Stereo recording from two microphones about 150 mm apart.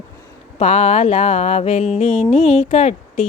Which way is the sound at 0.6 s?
45° left (ahead or behind).